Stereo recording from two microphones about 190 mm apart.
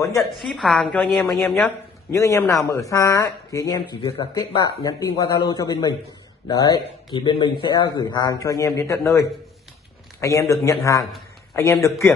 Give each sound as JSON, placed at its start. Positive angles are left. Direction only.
{"t": 0.2, "sound": "a woman's voice", "side_deg": 0}
{"t": 2.1, "sound": "speech", "side_deg": 15}
{"t": 10.5, "sound": "speech", "side_deg": 15}